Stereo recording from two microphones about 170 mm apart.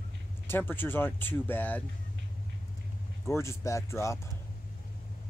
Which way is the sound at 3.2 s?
15° left (ahead or behind).